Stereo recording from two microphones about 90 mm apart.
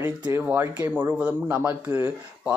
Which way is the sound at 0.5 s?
20° right (ahead or behind).